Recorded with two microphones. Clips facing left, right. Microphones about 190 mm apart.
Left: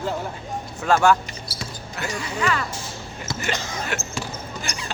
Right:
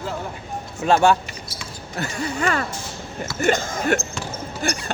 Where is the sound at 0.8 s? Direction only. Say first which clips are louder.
Right 1 dB; 25° right (ahead or behind).